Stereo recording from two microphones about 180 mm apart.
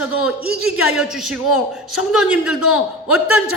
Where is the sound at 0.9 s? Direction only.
5° right (ahead or behind).